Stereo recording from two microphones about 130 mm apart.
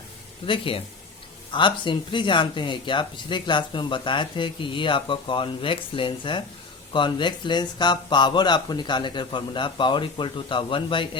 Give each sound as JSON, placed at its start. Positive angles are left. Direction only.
{"t": 0.4, "sound": "speech", "side_deg": 40}